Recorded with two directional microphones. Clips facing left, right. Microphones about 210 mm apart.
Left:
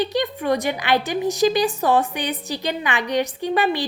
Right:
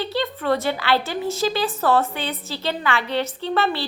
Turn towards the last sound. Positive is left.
turn(degrees=15)  # may be behind; listen again after turning